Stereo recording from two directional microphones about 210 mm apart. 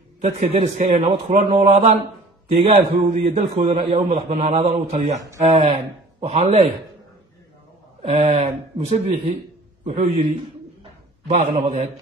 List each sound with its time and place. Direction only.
0.2 s a man's voice: 30° right (ahead or behind)
8.0 s a man's voice: 30° right (ahead or behind)
10.8 s a sound: 30° right (ahead or behind)